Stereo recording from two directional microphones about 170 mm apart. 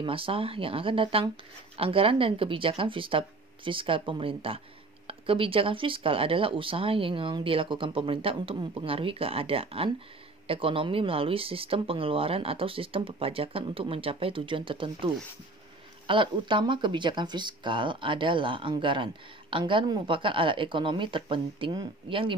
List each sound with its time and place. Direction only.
0.0 s speech: 30° right (ahead or behind)
16.1 s speech: 30° right (ahead or behind)